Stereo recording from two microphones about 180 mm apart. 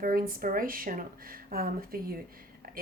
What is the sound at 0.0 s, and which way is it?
Speech, 55° right (ahead or behind).